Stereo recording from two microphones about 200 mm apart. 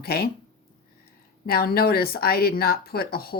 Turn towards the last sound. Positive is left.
turn(degrees=50)  # may be behind; listen again after turning